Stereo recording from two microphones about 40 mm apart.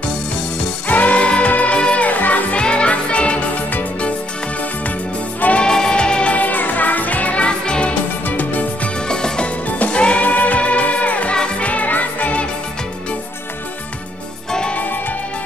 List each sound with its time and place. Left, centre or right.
0.8 s music: left
2.5 s music: left
5.6 s music: centre
6.3 s music: left
7.4 s music: left
8.3 s music: left
9.0 s music: left
9.7 s music: left
10.2 s music: left
11.3 s music: left